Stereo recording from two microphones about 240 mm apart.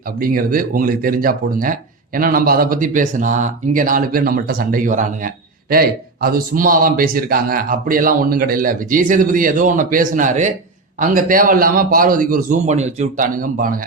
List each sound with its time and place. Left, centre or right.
0.2 s speech: right